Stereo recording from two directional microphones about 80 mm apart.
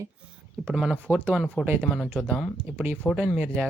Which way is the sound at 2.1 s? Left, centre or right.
Centre.